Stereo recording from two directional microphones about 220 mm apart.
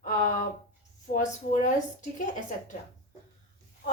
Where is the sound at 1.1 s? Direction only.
35° left (ahead or behind).